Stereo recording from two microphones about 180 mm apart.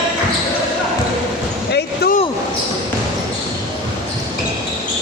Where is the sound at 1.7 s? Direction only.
60° left (ahead or behind).